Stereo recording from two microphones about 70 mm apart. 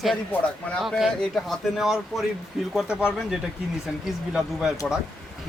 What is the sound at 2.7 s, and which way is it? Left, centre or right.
Speech, centre.